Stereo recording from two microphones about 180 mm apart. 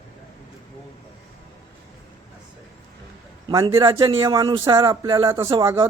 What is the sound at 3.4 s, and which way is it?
A man's voice, 25° right (ahead or behind).